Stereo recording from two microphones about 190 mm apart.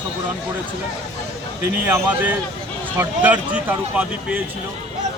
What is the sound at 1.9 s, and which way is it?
Speech, 15° right (ahead or behind).